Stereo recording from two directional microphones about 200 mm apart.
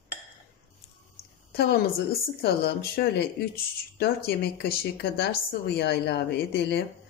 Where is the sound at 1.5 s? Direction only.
50° left (ahead or behind).